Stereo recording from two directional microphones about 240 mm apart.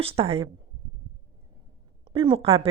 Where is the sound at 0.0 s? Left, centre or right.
Right.